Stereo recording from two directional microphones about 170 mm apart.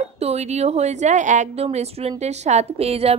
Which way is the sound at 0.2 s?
40° right (ahead or behind).